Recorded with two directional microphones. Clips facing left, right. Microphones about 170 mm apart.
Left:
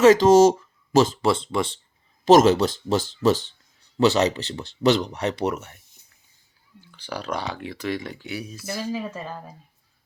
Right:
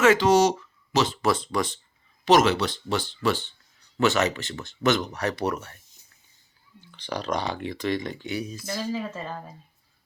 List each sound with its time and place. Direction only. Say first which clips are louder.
0.0 s speech: left 5 dB; 40° left (ahead or behind)
1.2 s speech: left 2 dB; 25° left (ahead or behind)
2.2 s speech: left 5 dB; 45° left (ahead or behind); by 5.8 s 20° left (ahead or behind)
6.9 s speech: right 1 dB; 10° left (ahead or behind)